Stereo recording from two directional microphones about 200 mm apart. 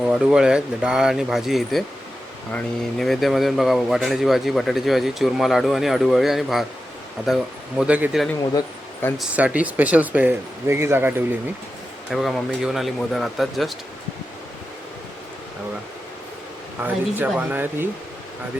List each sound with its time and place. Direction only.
0.0 s speech: 5° right (ahead or behind)
8.5 s a sound: 10° left (ahead or behind)
9.1 s speech: 5° right (ahead or behind)
16.8 s speech: 10° right (ahead or behind)